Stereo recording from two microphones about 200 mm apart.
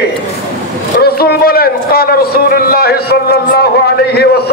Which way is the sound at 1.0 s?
50° left (ahead or behind).